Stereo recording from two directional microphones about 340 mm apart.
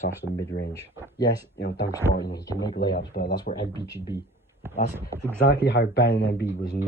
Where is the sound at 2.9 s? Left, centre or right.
Left.